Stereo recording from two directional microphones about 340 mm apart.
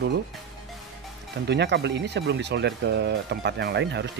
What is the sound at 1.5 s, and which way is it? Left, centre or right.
Speech, right.